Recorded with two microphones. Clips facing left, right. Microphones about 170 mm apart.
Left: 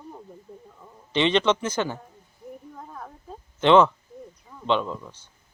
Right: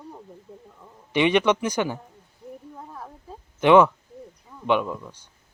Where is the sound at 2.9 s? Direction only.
5° right (ahead or behind).